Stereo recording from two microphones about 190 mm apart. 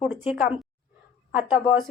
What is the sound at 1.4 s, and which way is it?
Speech, 25° left (ahead or behind).